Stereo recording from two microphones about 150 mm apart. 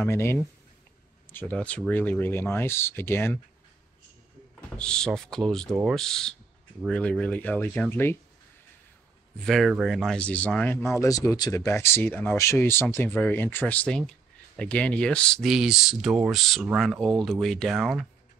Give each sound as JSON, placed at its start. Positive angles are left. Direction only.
{"t": 0.0, "sound": "speech", "side_deg": 15}
{"t": 4.6, "sound": "speech", "side_deg": 5}
{"t": 9.4, "sound": "speech", "side_deg": 0}